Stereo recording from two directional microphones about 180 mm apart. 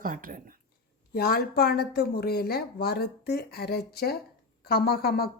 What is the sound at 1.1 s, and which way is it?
Speech, 60° left (ahead or behind).